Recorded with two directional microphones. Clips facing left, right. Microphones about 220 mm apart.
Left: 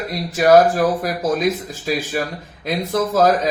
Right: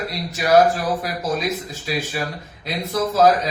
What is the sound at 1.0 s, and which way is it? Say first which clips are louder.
Speech: left 5 dB; 50° left (ahead or behind).